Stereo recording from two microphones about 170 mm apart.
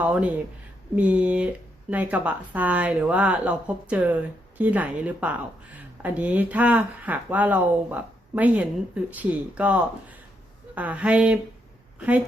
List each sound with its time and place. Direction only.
0.0 s a woman's voice: 10° right (ahead or behind)